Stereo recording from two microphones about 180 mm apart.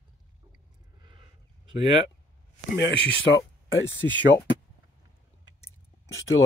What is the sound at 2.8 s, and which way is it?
Speech, 85° left.